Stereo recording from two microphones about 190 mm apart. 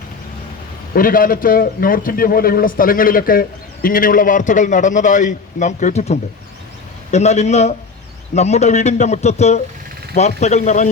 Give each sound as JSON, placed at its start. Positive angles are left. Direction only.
{"t": 0.9, "sound": "a man's voice", "side_deg": 45}